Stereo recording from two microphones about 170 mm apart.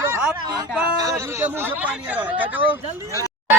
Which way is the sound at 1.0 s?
15° right (ahead or behind).